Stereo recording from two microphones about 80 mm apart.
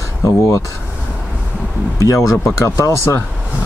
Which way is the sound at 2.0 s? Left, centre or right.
Left.